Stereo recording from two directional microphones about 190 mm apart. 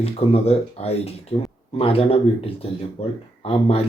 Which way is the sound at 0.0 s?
30° left (ahead or behind).